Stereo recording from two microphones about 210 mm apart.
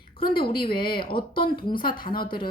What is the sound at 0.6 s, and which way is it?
Speech, 45° left (ahead or behind).